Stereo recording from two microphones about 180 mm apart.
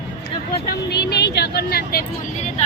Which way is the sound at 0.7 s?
65° left (ahead or behind).